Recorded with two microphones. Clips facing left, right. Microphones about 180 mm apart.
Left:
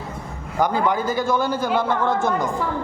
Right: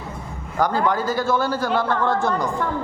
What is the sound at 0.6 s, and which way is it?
A man's voice, 20° left (ahead or behind).